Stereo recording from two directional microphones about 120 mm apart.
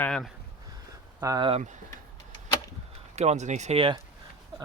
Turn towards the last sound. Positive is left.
turn(degrees=-45)  # may be behind; listen again after turning